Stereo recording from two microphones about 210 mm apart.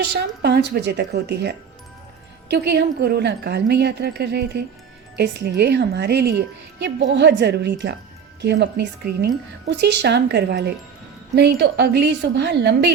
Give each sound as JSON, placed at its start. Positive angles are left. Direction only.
{"t": 0.1, "sound": "a woman's voice", "side_deg": -50}